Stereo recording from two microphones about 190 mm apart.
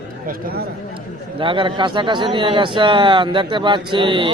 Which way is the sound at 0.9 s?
25° right (ahead or behind).